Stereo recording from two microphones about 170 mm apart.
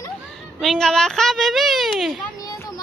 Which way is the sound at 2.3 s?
20° left (ahead or behind).